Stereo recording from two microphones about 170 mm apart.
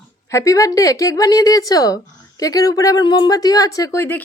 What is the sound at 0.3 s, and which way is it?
A woman's voice, 20° left (ahead or behind).